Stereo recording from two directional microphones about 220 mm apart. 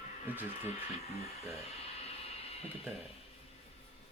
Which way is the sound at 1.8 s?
25° left (ahead or behind).